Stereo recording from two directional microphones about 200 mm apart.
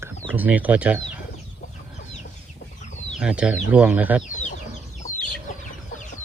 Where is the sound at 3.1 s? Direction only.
5° right (ahead or behind).